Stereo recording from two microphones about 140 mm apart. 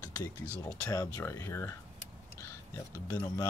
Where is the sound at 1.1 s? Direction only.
20° left (ahead or behind).